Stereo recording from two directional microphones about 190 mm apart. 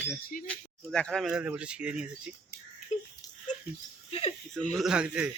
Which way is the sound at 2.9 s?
35° left (ahead or behind).